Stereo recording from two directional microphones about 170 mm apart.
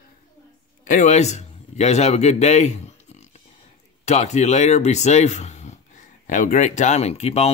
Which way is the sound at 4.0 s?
40° left (ahead or behind).